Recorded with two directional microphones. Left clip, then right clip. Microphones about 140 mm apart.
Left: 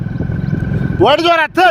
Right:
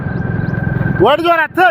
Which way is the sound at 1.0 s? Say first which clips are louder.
Left 1 dB; 35° left (ahead or behind).